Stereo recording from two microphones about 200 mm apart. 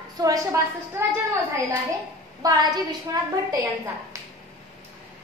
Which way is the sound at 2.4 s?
20° right (ahead or behind).